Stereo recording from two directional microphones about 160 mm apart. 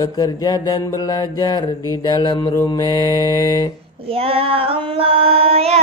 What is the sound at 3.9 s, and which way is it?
Female singing, 35° right (ahead or behind).